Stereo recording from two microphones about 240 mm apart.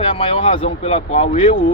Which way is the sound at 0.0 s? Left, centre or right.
Left.